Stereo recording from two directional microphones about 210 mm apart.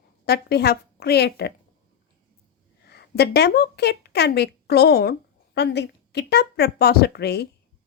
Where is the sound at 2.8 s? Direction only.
50° left (ahead or behind).